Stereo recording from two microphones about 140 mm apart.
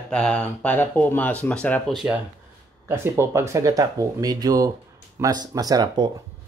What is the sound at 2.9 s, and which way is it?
Speech, 15° right (ahead or behind).